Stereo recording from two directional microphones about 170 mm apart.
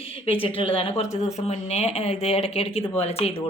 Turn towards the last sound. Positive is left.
turn(degrees=35)  # may be behind; listen again after turning